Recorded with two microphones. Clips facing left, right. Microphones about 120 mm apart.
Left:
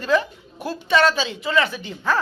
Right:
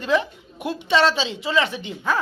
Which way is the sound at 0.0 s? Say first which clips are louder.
Left 1 dB; 20° right (ahead or behind).